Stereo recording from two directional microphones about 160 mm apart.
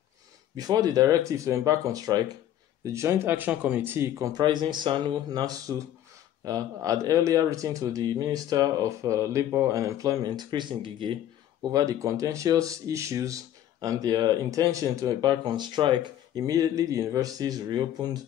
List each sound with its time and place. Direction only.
0.6 s speech: 25° right (ahead or behind)